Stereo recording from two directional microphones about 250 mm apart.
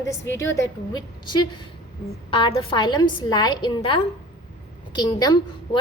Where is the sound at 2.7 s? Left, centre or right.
Centre.